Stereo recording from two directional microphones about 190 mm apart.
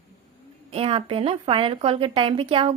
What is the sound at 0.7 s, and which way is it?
A woman's voice, 30° right (ahead or behind).